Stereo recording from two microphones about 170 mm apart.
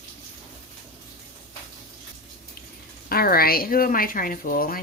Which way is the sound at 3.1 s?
60° left (ahead or behind).